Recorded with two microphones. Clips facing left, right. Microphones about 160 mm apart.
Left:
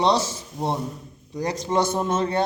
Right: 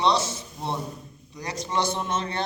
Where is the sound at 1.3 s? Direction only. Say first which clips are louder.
Left 5 dB; 45° left (ahead or behind).